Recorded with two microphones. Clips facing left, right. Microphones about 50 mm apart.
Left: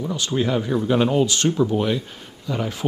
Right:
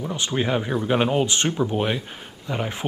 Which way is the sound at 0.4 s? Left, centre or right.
Right.